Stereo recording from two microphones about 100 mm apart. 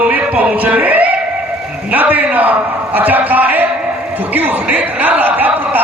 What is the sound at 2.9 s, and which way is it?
Speech, 15° right (ahead or behind).